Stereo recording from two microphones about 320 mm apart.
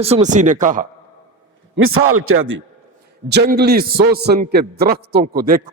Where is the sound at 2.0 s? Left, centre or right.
Right.